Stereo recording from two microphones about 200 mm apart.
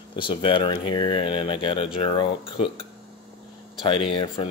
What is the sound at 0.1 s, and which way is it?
Speech, 25° left (ahead or behind).